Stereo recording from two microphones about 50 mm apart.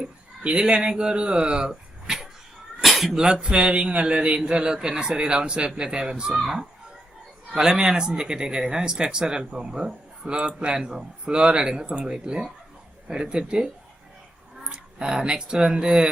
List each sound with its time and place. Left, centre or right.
0.0 s speech: centre
3.4 s a man's voice: centre
14.7 s speech: centre